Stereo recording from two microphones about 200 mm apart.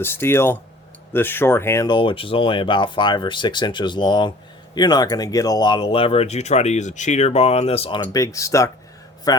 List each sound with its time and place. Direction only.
0.0 s speech: 10° left (ahead or behind); by 8.0 s 25° left (ahead or behind)
8.1 s speech: 15° left (ahead or behind)